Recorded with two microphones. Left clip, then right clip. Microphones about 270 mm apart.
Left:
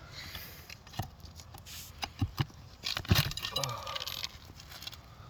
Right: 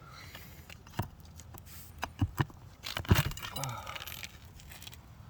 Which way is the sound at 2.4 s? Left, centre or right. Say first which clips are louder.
Even; right.